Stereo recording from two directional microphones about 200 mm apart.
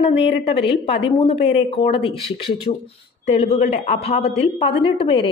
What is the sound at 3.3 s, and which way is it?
A woman's voice, 30° left (ahead or behind).